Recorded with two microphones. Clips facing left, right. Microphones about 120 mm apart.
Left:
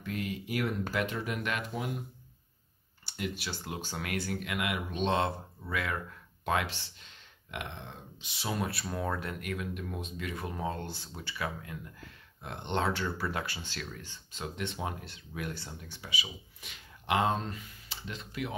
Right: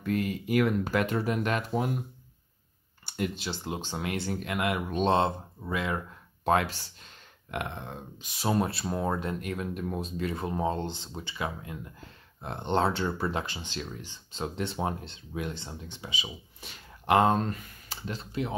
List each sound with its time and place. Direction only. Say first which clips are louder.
0.0 s speech: right 7 dB; 50° right (ahead or behind)
3.3 s speech: right 4 dB; 25° right (ahead or behind); by 5.1 s 45° right (ahead or behind)
5.1 s speech: right 4 dB; 25° right (ahead or behind)
6.4 s speech: right 6 dB; 40° right (ahead or behind)
8.6 s speech: right 4 dB; 25° right (ahead or behind)
14.4 s speech: right 5 dB; 35° right (ahead or behind)
17.0 s speech: right 6 dB; 45° right (ahead or behind)
18.2 s speech: right 5 dB; 30° right (ahead or behind)